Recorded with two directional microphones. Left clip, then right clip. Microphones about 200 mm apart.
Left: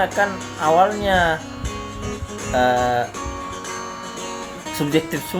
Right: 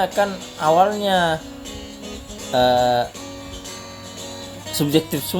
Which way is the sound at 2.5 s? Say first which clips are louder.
Right 1 dB; 50° right (ahead or behind).